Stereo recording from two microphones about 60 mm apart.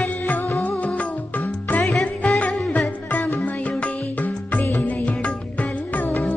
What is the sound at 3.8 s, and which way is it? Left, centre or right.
Music, left.